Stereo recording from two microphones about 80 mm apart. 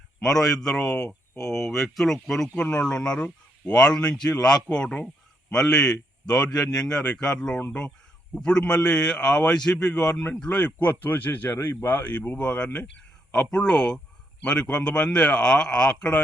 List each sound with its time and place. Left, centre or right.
0.2 s speech: centre; by 11.5 s left
11.6 s speech: left
11.9 s speech: left